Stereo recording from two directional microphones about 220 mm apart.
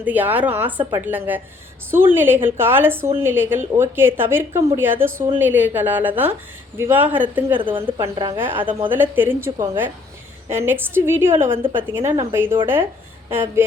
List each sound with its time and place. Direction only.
0.0 s a woman's voice: 10° right (ahead or behind)
0.8 s a woman's voice: 20° right (ahead or behind)
1.0 s a woman's voice: 10° right (ahead or behind)
7.6 s a woman's voice: 25° right (ahead or behind)